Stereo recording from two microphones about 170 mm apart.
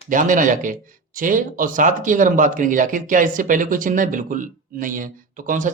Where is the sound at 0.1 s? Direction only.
50° right (ahead or behind).